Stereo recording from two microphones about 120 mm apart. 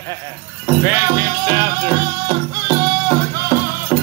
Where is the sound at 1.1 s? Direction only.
30° right (ahead or behind).